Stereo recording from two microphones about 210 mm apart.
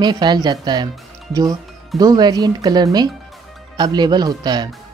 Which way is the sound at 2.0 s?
20° right (ahead or behind).